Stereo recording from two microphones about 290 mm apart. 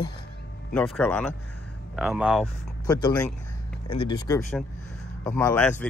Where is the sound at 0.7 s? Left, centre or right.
Centre.